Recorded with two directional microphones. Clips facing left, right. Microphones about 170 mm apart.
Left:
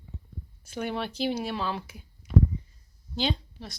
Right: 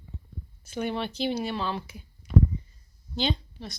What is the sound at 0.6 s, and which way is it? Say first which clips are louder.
A child's voice: right 2 dB; 5° left (ahead or behind).